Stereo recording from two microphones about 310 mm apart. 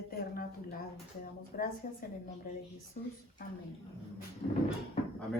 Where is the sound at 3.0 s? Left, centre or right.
Left.